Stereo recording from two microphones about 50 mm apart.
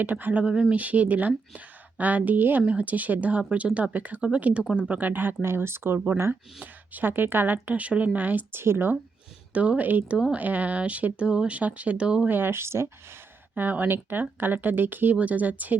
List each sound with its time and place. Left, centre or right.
0.0 s speech: right
0.4 s speech: centre; by 5.5 s right
5.5 s speech: right
6.9 s speech: right
8.5 s speech: right
9.5 s speech: right
12.3 s speech: right
13.6 s speech: right